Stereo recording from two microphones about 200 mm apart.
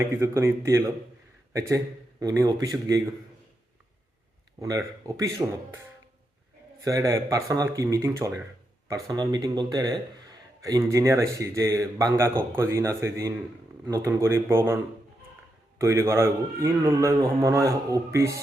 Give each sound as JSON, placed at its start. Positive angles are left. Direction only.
{"t": 0.0, "sound": "a man's voice", "side_deg": -15}
{"t": 4.6, "sound": "a man's voice", "side_deg": -15}
{"t": 6.8, "sound": "a man's voice", "side_deg": -15}
{"t": 15.8, "sound": "a man's voice", "side_deg": -15}